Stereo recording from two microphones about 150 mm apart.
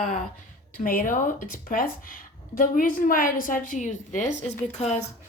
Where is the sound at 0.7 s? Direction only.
70° left (ahead or behind).